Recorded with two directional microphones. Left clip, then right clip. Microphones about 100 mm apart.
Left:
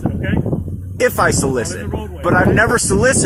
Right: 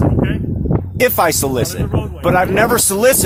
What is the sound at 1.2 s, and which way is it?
Speech, 70° right (ahead or behind).